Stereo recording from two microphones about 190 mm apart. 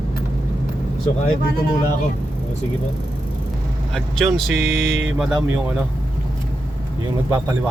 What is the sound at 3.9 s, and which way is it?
Speech, centre (ahead or behind).